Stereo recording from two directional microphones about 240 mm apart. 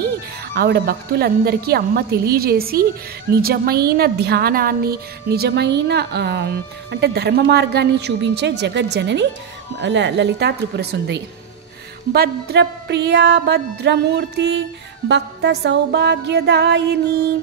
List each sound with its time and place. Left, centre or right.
0.6 s a woman's voice: right